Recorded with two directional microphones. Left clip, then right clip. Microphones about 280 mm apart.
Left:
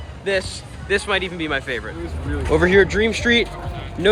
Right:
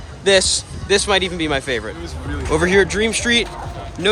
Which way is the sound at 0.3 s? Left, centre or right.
Centre.